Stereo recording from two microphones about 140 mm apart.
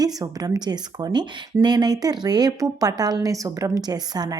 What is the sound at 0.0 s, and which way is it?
A woman's voice, 25° right (ahead or behind).